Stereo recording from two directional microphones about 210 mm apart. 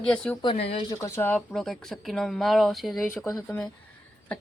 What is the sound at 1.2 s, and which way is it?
Speech, 10° left (ahead or behind).